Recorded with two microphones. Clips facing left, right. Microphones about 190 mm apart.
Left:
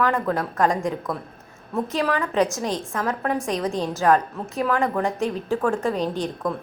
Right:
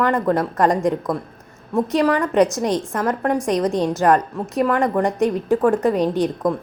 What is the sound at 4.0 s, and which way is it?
Speech, 15° right (ahead or behind).